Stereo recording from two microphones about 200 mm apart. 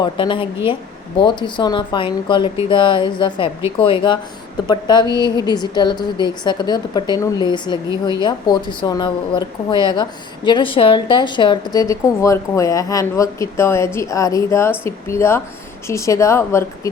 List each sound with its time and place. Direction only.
0.0 s a woman's voice: 25° left (ahead or behind)